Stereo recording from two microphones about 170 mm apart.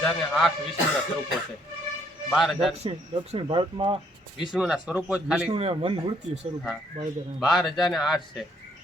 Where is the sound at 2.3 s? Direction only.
Centre (ahead or behind).